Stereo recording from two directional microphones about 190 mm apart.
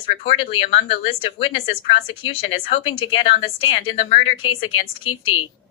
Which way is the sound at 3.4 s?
90° left.